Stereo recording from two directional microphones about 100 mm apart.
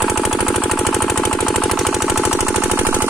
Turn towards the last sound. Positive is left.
turn(degrees=-20)  # may be behind; listen again after turning